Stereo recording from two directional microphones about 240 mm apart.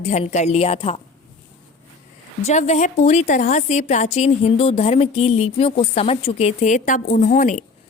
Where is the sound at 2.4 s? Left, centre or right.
Left.